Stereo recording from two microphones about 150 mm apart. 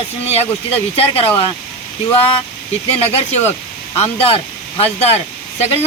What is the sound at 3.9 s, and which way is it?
Speech, 40° left (ahead or behind).